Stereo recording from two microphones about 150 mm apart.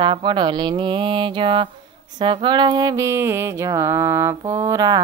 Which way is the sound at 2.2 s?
30° right (ahead or behind).